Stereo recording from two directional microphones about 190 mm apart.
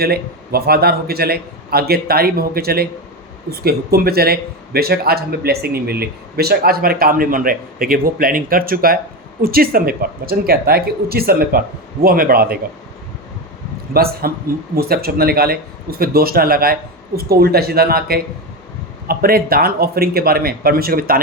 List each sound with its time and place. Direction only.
0.0 s a man's voice: 55° right (ahead or behind)
13.9 s a man's voice: 50° right (ahead or behind)